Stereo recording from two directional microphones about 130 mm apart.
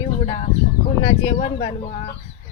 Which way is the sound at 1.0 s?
60° left (ahead or behind).